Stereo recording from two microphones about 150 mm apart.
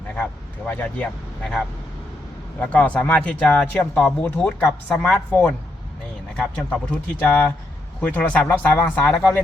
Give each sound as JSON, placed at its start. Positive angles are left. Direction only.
{"t": 0.2, "sound": "vehicle", "side_deg": 10}
{"t": 2.6, "sound": "speech", "side_deg": 10}